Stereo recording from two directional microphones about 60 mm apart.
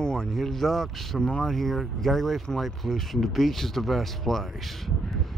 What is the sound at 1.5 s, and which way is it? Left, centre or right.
Speech, centre.